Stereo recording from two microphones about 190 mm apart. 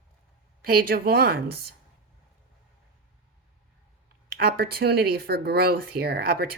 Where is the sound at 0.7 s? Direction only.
50° right (ahead or behind).